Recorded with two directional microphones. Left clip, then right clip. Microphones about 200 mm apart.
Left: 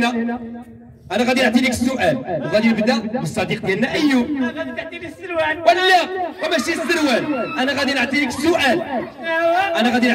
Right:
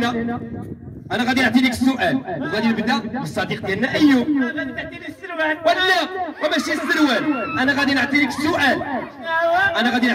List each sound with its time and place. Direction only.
1.1 s a man's voice: 45° left (ahead or behind)